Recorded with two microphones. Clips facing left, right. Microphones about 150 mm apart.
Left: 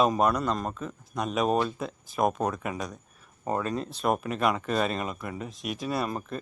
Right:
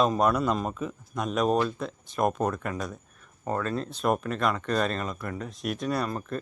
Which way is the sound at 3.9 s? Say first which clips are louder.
Right 1 dB; centre (ahead or behind).